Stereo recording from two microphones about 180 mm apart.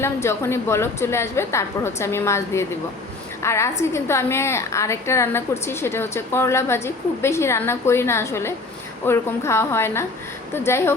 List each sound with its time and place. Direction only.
0.0 s a woman's voice: 15° left (ahead or behind)